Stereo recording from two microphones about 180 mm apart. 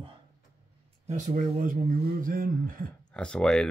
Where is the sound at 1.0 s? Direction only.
45° right (ahead or behind).